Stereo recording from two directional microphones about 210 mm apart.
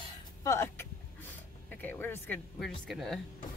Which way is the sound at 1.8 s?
10° left (ahead or behind).